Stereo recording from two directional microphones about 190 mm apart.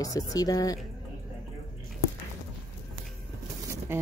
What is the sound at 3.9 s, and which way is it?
Speech, 10° right (ahead or behind).